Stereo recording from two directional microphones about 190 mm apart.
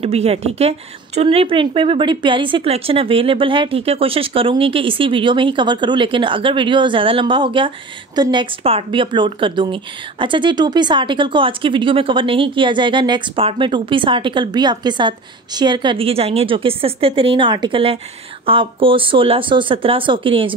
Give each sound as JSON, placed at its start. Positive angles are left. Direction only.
{"t": 0.0, "sound": "speech", "side_deg": -30}